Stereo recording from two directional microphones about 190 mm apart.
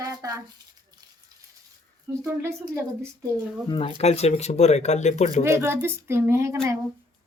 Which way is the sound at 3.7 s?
30° left (ahead or behind).